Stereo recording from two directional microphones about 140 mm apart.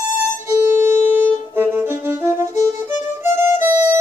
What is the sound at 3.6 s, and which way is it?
Music, 20° right (ahead or behind).